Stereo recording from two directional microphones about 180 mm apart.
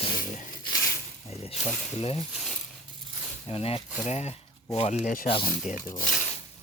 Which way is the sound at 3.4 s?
30° left (ahead or behind).